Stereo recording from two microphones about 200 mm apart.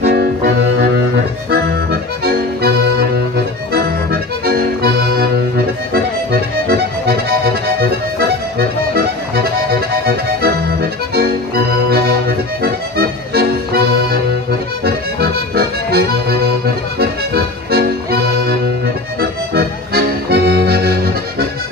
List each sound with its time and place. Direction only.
0.0 s accordion: 55° right (ahead or behind)
6.7 s accordion: 50° right (ahead or behind)
8.2 s music: 50° right (ahead or behind)
15.1 s accordion: 50° right (ahead or behind)
17.3 s music: 50° right (ahead or behind)
19.5 s accordion: 50° right (ahead or behind)